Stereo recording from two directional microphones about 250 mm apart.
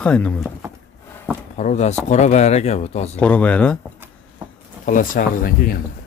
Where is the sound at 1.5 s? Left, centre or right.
Left.